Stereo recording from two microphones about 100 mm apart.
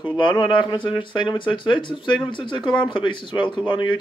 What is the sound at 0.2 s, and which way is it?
Speech, 55° left (ahead or behind).